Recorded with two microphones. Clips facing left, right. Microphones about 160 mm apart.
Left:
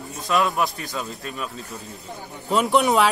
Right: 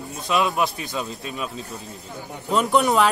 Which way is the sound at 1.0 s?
20° right (ahead or behind).